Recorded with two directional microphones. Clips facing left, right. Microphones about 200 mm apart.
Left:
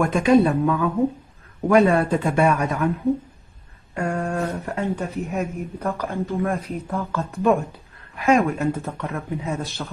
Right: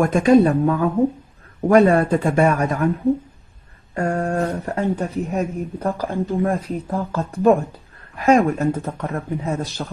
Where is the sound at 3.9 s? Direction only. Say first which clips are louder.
Right 3 dB; 45° right (ahead or behind).